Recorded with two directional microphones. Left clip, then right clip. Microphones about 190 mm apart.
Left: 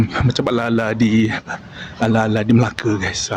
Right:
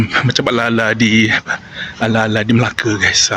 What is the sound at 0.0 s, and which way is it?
Speech, 5° left (ahead or behind).